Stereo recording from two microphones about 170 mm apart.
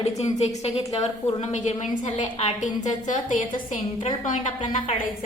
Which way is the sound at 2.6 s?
45° left (ahead or behind).